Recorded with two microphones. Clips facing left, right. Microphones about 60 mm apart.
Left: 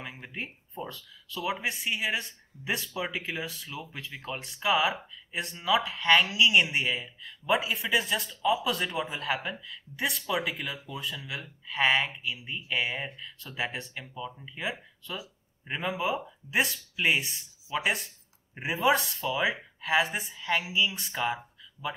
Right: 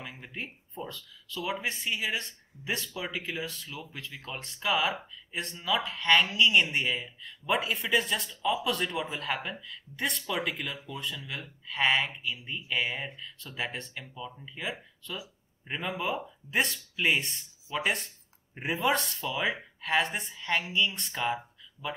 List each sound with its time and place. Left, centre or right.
0.0 s speech: centre